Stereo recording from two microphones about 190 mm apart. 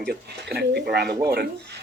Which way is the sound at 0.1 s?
60° right (ahead or behind).